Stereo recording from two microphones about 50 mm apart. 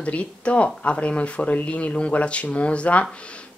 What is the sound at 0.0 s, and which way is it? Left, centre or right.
Speech, left.